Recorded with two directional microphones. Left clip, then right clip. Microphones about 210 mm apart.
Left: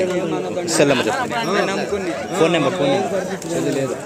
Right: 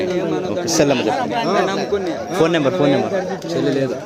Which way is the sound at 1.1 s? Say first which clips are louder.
Right 2 dB; 50° right (ahead or behind).